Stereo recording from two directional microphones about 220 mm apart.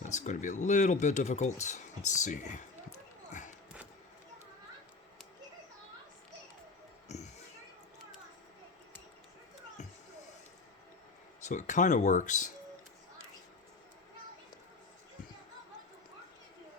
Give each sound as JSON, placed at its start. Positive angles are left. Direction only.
{"t": 0.0, "sound": "speech", "side_deg": 35}
{"t": 11.3, "sound": "speech", "side_deg": 35}